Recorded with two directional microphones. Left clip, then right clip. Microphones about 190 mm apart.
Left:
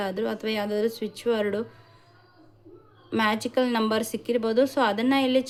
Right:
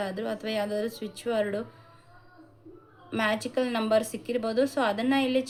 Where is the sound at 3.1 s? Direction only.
35° left (ahead or behind).